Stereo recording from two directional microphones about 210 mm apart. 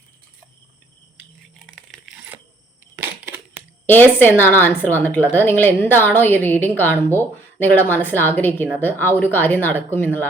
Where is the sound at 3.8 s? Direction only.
10° left (ahead or behind).